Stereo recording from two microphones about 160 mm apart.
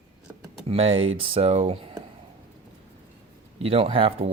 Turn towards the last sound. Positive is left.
turn(degrees=-35)  # may be behind; listen again after turning